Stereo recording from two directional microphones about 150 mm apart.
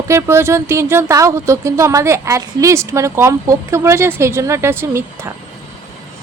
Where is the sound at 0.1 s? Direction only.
15° right (ahead or behind).